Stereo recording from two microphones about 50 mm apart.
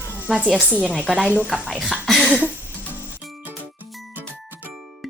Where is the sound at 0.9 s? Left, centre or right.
Right.